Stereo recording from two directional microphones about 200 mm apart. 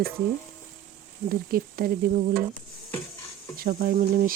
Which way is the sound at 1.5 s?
50° right (ahead or behind).